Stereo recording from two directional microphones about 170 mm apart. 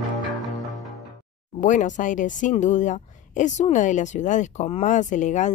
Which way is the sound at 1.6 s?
45° left (ahead or behind).